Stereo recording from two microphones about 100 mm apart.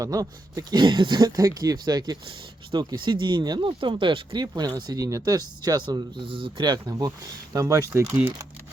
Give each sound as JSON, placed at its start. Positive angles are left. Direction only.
{"t": 0.0, "sound": "speech", "side_deg": -35}
{"t": 7.5, "sound": "speech", "side_deg": -30}